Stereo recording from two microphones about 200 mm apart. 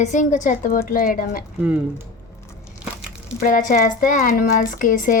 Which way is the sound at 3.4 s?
45° left (ahead or behind).